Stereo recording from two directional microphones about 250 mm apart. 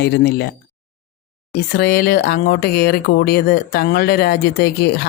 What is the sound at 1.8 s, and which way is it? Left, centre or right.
Speech, left.